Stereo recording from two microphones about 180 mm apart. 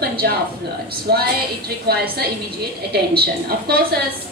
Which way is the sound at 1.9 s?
60° right (ahead or behind).